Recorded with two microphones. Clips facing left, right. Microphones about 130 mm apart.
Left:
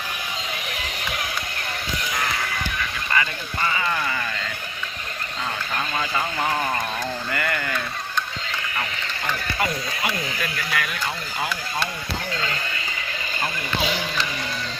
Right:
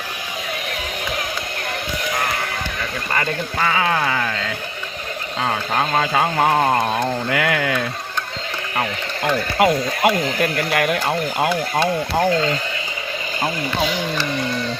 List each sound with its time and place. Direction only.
3.6 s sheep: 90° right
5.4 s speech: 80° right
8.7 s speech: 65° right (ahead or behind)